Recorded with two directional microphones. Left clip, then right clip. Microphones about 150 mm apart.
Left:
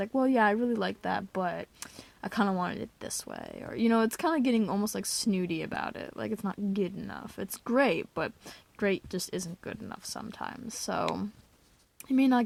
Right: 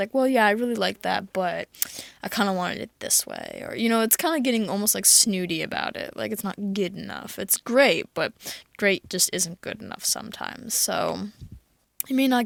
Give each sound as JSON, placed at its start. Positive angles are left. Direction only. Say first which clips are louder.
{"t": 0.0, "sound": "speech", "louder": "right 6 dB", "side_deg": -15}